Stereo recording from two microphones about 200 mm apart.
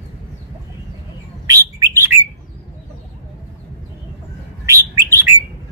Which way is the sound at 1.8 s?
10° right (ahead or behind).